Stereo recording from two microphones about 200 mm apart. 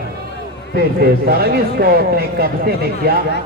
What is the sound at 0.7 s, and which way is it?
Speech, 50° right (ahead or behind).